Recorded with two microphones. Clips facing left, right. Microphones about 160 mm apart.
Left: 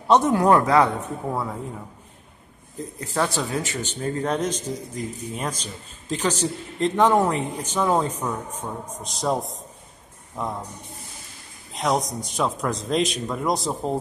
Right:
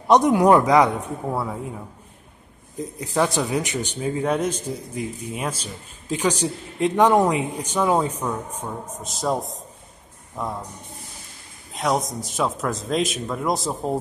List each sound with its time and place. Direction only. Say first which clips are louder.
0.1 s a man's voice: right 2 dB; 15° right (ahead or behind)
3.0 s a man's voice: right 3 dB; 15° right (ahead or behind)
11.7 s speech: even; centre (ahead or behind)